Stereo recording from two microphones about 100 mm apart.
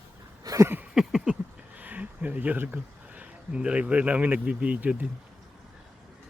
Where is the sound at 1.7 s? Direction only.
15° right (ahead or behind).